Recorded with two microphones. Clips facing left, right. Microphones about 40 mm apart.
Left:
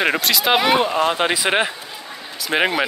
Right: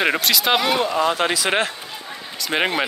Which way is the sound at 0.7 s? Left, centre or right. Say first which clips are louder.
Left 2 dB; left.